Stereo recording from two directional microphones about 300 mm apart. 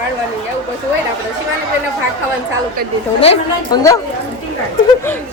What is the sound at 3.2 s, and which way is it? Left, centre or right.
Speech, centre.